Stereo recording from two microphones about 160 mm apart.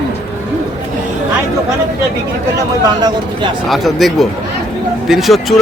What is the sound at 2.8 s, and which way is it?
Speech, 25° right (ahead or behind).